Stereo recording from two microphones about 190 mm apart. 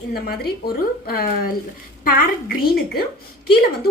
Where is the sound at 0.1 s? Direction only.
55° left (ahead or behind).